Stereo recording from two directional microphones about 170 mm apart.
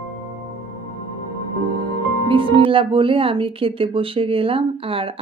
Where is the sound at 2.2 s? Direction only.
30° right (ahead or behind).